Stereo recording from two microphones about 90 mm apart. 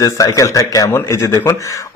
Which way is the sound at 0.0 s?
40° left (ahead or behind).